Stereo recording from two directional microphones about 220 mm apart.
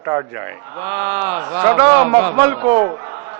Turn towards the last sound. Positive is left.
turn(degrees=-20)  # may be behind; listen again after turning